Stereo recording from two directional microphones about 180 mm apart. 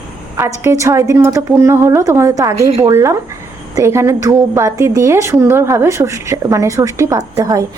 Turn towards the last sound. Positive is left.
turn(degrees=-20)  # may be behind; listen again after turning